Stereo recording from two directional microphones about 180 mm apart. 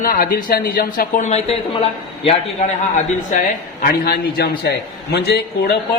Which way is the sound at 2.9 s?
45° left (ahead or behind).